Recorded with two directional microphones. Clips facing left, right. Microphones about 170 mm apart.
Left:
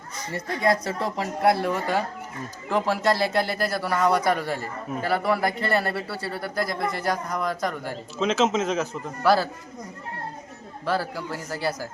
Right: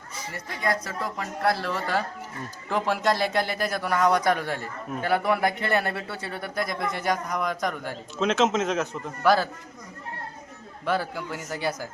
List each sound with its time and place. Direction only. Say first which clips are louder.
0.3 s speech: left 5 dB; 30° left (ahead or behind)
2.6 s a man's voice: left 2 dB; 5° left (ahead or behind)
10.8 s a man's voice: left 1 dB; 5° left (ahead or behind)